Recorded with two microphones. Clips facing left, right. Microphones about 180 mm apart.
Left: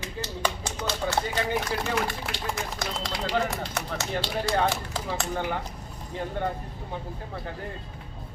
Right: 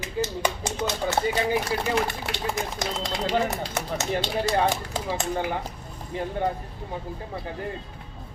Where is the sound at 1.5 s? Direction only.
10° right (ahead or behind).